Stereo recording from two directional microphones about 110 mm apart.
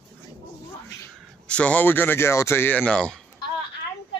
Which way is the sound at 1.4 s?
10° left (ahead or behind).